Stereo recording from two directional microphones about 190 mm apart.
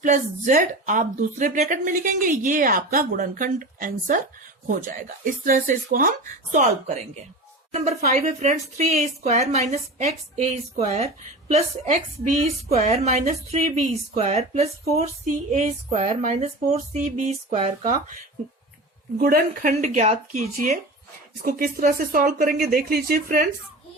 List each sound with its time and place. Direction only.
0.0 s a woman's voice: 40° right (ahead or behind)
19.2 s speech: 50° right (ahead or behind)
21.4 s a woman's voice: 50° right (ahead or behind)